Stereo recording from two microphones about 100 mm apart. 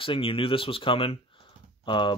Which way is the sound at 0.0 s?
65° left (ahead or behind).